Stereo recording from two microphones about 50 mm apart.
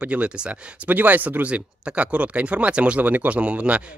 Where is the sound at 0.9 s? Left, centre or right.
Right.